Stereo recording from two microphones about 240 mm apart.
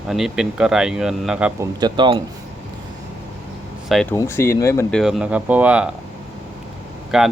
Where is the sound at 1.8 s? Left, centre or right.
Right.